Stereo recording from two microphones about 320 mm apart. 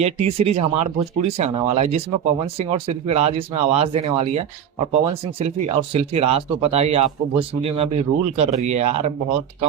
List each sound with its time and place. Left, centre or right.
0.0 s speech: centre